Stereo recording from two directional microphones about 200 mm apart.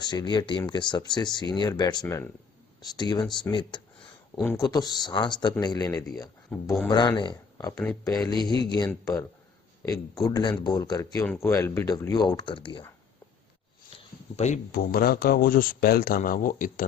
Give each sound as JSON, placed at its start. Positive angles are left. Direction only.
{"t": 0.0, "sound": "speech", "side_deg": 20}
{"t": 10.2, "sound": "speech", "side_deg": 20}
{"t": 13.9, "sound": "a sound", "side_deg": 35}
{"t": 14.7, "sound": "speech", "side_deg": 50}